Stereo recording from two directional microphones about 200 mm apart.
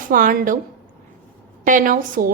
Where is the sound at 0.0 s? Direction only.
45° right (ahead or behind).